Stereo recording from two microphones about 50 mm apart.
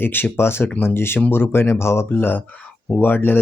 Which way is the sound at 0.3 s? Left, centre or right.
Left.